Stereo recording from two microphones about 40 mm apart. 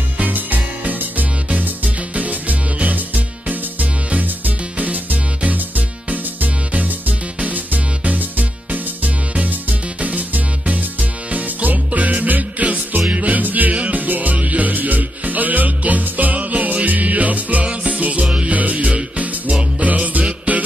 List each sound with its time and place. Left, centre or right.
0.2 s music: right
18.5 s music: right